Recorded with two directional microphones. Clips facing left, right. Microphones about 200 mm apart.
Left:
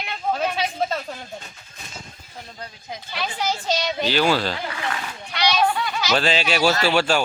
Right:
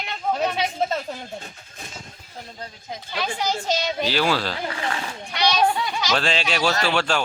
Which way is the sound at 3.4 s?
10° right (ahead or behind).